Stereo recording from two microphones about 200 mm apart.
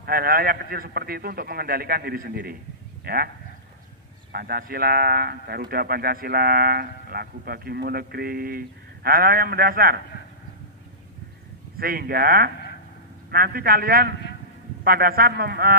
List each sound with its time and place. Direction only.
0.0 s speech: 50° right (ahead or behind)
4.3 s speech: 50° right (ahead or behind)
11.8 s speech: 50° right (ahead or behind)